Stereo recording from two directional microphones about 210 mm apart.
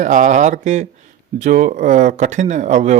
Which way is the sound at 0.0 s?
35° right (ahead or behind).